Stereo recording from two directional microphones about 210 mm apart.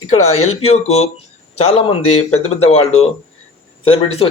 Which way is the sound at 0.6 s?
30° left (ahead or behind).